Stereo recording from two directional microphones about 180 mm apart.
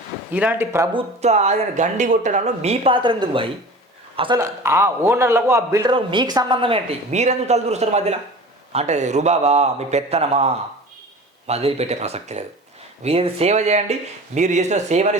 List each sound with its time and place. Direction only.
0.3 s speech: 10° right (ahead or behind)
0.9 s speech: 40° right (ahead or behind)
4.4 s a man's voice: 15° right (ahead or behind); by 15.2 s 40° right (ahead or behind)